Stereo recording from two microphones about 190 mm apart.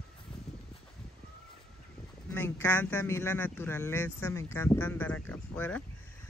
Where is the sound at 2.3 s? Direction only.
10° left (ahead or behind).